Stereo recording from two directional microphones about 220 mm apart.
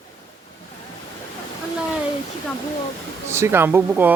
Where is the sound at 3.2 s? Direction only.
10° right (ahead or behind).